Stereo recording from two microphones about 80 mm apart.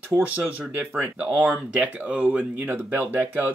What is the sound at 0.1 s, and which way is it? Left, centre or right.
Speech, right.